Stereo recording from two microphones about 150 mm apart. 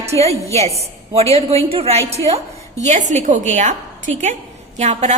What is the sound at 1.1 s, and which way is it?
A woman's voice, 40° right (ahead or behind).